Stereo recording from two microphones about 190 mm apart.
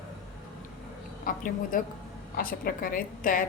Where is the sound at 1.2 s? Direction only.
45° left (ahead or behind).